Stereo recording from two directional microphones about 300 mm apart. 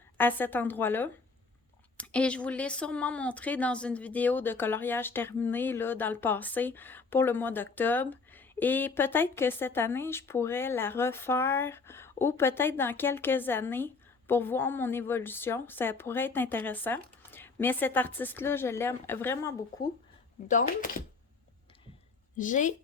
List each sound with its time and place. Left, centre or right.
0.2 s speech: centre
22.4 s speech: left